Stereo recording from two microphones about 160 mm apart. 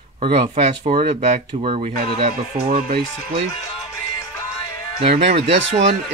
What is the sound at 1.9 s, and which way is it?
Speech, 65° right (ahead or behind).